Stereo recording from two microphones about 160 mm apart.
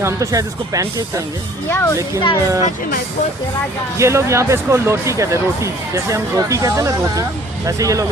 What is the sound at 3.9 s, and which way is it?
Speech, 15° right (ahead or behind).